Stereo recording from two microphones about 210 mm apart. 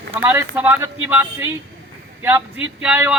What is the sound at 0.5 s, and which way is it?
Speech, 10° right (ahead or behind).